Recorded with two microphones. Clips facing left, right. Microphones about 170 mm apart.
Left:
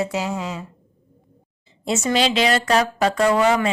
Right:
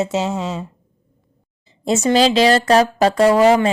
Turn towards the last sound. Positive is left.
turn(degrees=-30)  # may be behind; listen again after turning